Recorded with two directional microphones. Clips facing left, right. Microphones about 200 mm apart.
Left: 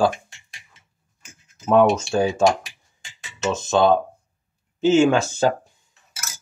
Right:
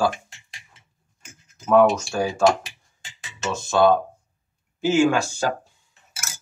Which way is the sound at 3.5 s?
20° left (ahead or behind).